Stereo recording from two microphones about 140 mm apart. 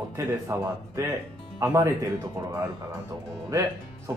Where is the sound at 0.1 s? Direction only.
20° right (ahead or behind).